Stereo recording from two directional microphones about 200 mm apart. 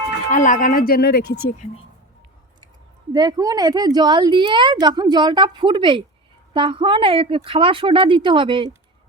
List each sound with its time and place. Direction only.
0.3 s speech: 40° left (ahead or behind)
3.1 s a woman's voice: 20° right (ahead or behind)